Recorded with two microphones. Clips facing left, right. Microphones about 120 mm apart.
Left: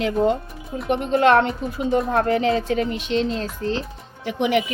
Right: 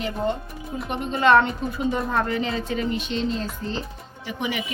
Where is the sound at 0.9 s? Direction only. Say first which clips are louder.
Left 2 dB; 70° left (ahead or behind).